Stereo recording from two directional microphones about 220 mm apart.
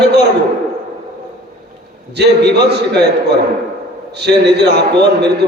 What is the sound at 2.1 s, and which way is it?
A man's voice, 50° right (ahead or behind).